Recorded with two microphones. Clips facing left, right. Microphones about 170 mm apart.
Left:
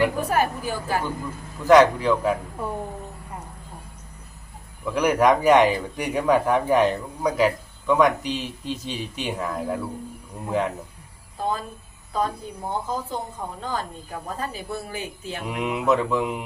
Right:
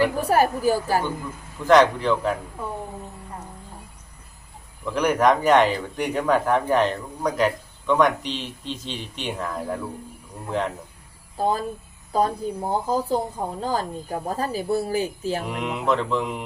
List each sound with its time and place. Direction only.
0.3 s speech: 40° right (ahead or behind)
1.6 s speech: 10° left (ahead or behind)
4.9 s speech: 10° left (ahead or behind)
11.3 s speech: 35° right (ahead or behind)
15.4 s speech: 5° left (ahead or behind)